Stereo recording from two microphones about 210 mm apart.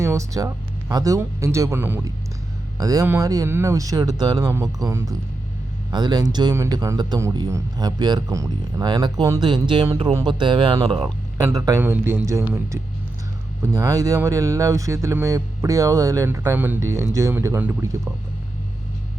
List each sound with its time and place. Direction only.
0.0 s a man's voice: 15° right (ahead or behind)